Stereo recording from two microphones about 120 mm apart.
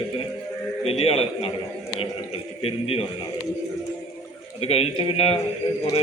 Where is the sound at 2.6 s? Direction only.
55° left (ahead or behind).